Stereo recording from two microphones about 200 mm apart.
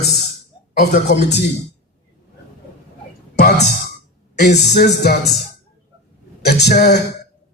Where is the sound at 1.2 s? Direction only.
55° left (ahead or behind).